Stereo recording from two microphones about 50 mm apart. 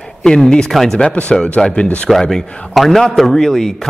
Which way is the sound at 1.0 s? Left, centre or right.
Centre.